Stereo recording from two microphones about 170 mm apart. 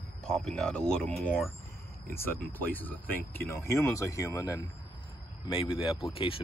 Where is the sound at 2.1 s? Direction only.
15° left (ahead or behind).